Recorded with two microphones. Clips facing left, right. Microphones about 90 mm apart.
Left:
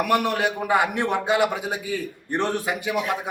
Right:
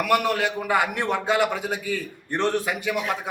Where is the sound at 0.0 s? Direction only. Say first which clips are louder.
Even; 20° left (ahead or behind).